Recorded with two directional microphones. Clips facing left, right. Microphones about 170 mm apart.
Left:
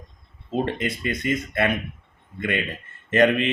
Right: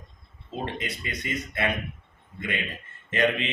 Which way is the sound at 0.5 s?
55° left (ahead or behind).